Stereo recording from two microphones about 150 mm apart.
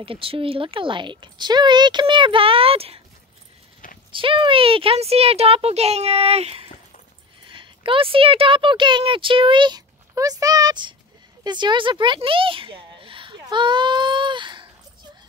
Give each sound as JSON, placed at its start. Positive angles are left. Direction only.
{"t": 0.0, "sound": "speech", "side_deg": -35}
{"t": 4.1, "sound": "speech", "side_deg": -35}